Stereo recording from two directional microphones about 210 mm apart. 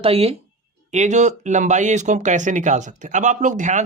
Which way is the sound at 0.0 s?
30° right (ahead or behind).